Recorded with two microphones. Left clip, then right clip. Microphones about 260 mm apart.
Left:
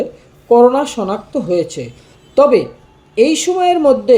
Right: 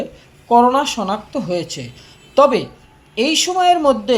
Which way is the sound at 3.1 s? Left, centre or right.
Right.